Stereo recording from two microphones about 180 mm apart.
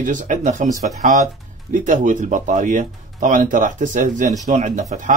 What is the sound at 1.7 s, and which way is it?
Speech, 45° right (ahead or behind).